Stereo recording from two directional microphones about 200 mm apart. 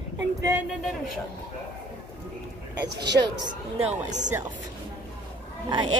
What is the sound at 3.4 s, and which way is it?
Speech, 20° right (ahead or behind).